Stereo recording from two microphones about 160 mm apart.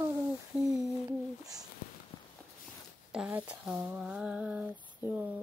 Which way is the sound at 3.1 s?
10° right (ahead or behind).